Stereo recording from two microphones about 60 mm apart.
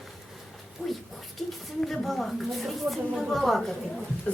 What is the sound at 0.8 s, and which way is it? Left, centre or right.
Speech, left.